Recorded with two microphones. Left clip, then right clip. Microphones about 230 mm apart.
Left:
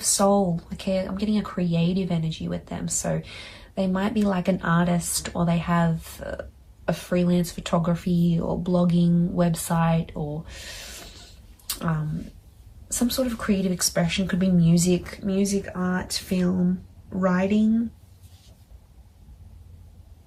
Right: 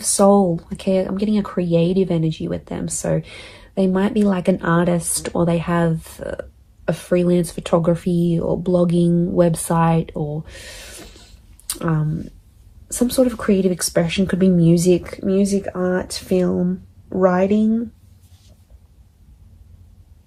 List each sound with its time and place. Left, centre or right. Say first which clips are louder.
0.0 s speech: right 6 dB; right
11.0 s a sound: right 2 dB; right
12.9 s speech: right 8 dB; right